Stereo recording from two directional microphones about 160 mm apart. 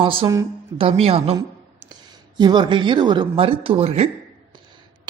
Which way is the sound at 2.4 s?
30° right (ahead or behind).